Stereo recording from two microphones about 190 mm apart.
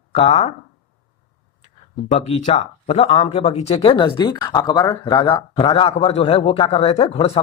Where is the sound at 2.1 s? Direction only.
35° left (ahead or behind).